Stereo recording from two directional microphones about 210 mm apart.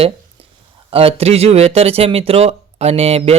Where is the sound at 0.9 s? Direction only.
25° right (ahead or behind).